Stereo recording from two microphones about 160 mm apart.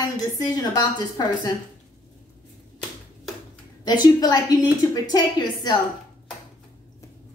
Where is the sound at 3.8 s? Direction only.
25° left (ahead or behind).